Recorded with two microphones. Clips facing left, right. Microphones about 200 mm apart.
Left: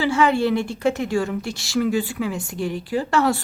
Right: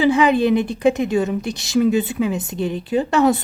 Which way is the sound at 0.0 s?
15° right (ahead or behind).